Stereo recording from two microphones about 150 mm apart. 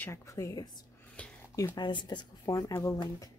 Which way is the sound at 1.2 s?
10° left (ahead or behind).